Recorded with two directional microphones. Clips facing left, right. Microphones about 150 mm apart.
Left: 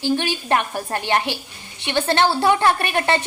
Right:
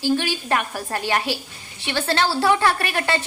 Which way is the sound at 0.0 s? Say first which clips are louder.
Even; 20° left (ahead or behind).